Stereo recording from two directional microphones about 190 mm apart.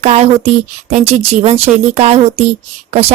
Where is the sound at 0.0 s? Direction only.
35° right (ahead or behind).